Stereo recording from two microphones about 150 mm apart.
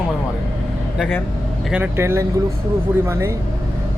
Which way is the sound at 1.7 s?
10° right (ahead or behind).